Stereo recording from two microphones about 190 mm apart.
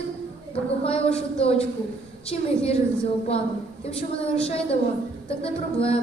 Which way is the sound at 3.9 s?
30° left (ahead or behind).